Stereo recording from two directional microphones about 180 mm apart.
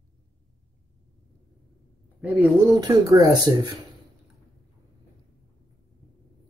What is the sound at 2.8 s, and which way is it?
Speech, 20° right (ahead or behind).